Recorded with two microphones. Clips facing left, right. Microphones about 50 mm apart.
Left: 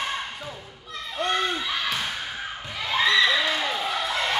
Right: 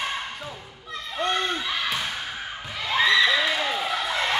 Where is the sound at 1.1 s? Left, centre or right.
Centre.